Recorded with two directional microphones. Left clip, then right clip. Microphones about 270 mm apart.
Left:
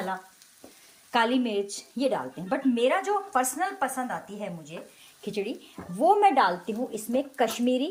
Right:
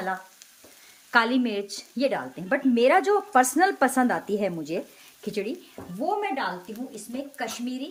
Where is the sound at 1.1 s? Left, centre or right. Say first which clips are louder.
Right 2 dB; centre; by 4.7 s right.